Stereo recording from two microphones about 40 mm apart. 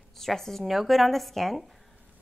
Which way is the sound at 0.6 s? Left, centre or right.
Centre.